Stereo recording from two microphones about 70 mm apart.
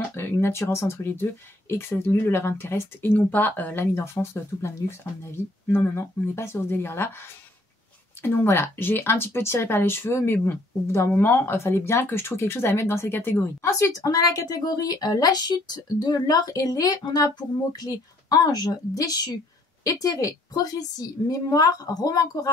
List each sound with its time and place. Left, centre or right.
0.1 s speech: left
3.1 s speech: left
8.2 s speech: left
13.7 s a woman's voice: left
16.2 s a woman's voice: left
17.7 s a woman's voice: left